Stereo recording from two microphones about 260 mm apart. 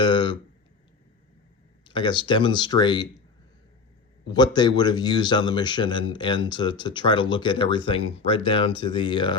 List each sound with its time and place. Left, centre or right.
0.0 s a sound: centre
1.8 s speech: centre
4.3 s speech: centre